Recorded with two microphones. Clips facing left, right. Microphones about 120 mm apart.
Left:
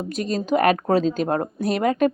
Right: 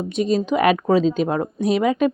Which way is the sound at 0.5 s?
45° left (ahead or behind).